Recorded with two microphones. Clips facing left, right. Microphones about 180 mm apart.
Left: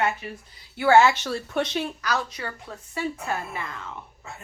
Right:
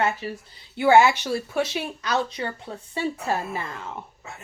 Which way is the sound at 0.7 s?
15° right (ahead or behind).